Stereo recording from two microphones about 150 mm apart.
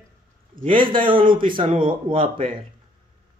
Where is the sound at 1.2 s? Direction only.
70° right (ahead or behind).